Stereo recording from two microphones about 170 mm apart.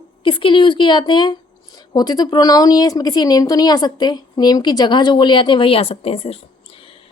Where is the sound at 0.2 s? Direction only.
30° left (ahead or behind).